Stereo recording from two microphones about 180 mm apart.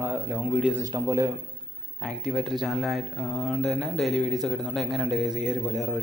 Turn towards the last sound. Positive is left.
turn(degrees=0)  # may be behind; listen again after turning